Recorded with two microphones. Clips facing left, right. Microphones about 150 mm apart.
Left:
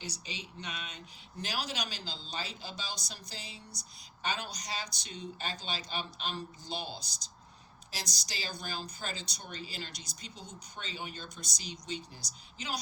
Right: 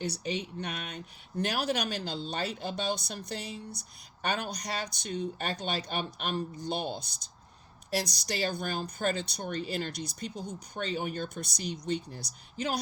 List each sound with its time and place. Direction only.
0.0 s speech: 55° right (ahead or behind)